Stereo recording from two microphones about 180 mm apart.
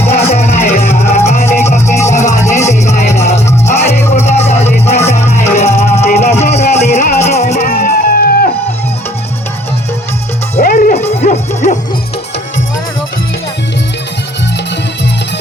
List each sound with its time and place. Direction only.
0.1 s music: 35° left (ahead or behind)
7.6 s music: 55° left (ahead or behind)
10.6 s music: 50° left (ahead or behind)
10.9 s music: 35° left (ahead or behind)